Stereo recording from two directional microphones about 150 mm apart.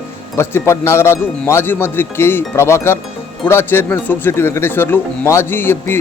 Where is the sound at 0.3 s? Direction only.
15° left (ahead or behind).